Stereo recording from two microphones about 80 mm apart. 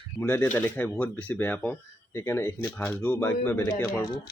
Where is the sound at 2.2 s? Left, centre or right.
Left.